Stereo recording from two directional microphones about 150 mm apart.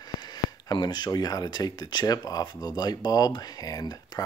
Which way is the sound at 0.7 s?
30° left (ahead or behind).